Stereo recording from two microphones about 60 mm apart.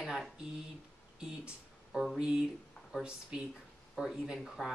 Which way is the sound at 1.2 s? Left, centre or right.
Centre.